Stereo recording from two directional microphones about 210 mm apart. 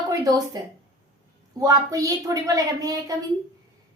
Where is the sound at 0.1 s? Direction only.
20° right (ahead or behind).